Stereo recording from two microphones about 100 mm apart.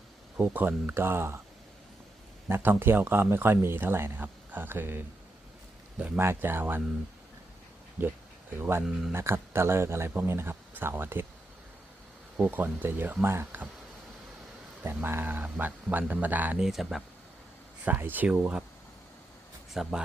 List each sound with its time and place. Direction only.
0.3 s speech: 15° right (ahead or behind)
2.5 s speech: 25° right (ahead or behind)
8.0 s speech: 20° right (ahead or behind)
12.4 s speech: 20° right (ahead or behind)
14.8 s speech: 25° right (ahead or behind)
16.6 s speech: centre (ahead or behind)
17.8 s speech: 20° right (ahead or behind)
19.7 s speech: 5° right (ahead or behind)